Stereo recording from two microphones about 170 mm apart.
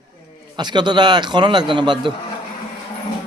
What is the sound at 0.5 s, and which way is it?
A man's voice, 25° right (ahead or behind).